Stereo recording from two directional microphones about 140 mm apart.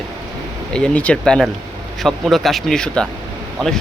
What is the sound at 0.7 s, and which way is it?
Speech, 10° left (ahead or behind).